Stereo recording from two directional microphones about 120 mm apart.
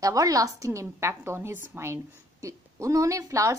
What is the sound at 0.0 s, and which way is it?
A woman's voice, 30° right (ahead or behind).